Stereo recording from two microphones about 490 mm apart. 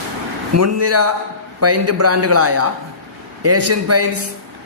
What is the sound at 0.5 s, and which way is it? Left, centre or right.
A man's voice, right.